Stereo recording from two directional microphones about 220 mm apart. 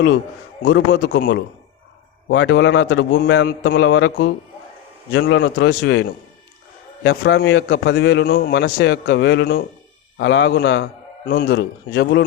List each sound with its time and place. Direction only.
0.6 s a man's voice: 55° left (ahead or behind)
5.3 s a man's voice: 55° left (ahead or behind)